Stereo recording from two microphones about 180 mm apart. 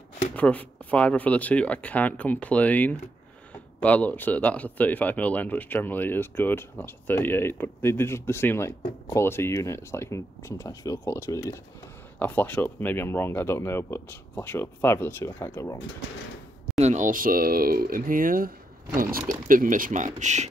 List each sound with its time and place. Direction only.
0.4 s speech: 10° left (ahead or behind)
16.7 s speech: 40° right (ahead or behind)